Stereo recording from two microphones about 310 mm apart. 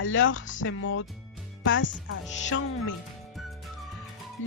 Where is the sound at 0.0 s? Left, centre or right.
Left.